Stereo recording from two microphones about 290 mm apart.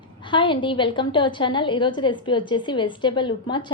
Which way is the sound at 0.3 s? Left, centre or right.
Centre.